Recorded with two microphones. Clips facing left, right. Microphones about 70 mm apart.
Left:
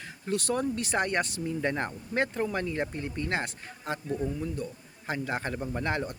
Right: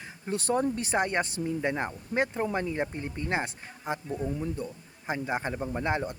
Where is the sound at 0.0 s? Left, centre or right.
Right.